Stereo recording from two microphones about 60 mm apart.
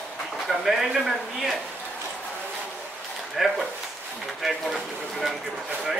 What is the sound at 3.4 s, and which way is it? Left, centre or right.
Speech, centre.